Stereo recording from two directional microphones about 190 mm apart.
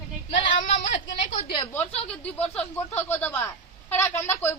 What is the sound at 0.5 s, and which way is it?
A woman's voice, 40° left (ahead or behind).